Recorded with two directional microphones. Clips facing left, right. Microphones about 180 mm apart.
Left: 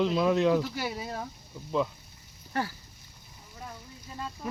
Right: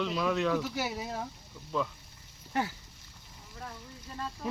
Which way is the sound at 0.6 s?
5° right (ahead or behind).